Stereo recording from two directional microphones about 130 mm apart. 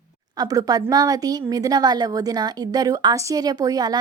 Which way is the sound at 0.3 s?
30° right (ahead or behind).